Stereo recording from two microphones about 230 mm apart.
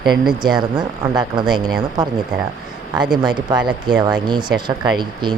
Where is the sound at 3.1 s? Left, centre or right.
Centre.